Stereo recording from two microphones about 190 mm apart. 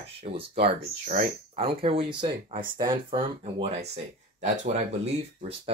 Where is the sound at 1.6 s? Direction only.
30° right (ahead or behind).